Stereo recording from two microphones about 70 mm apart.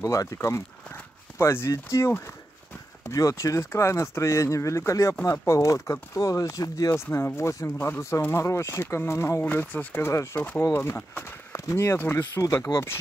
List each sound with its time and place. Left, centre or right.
0.0 s speech: left
6.9 s speech: left
9.4 s speech: left
11.5 s speech: left
12.4 s speech: left